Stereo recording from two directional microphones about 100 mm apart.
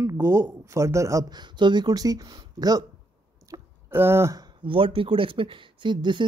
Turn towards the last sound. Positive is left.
turn(degrees=-50)  # may be behind; listen again after turning